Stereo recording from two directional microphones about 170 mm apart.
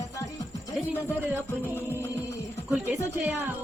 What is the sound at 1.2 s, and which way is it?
Music, 10° right (ahead or behind).